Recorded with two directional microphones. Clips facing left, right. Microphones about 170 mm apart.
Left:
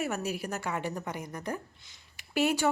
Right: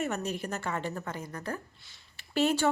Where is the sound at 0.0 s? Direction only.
10° left (ahead or behind).